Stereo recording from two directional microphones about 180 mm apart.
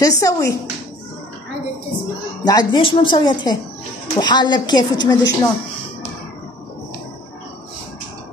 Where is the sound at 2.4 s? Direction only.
25° left (ahead or behind).